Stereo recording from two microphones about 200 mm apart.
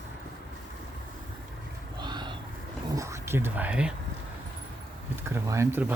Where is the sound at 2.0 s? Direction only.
20° right (ahead or behind).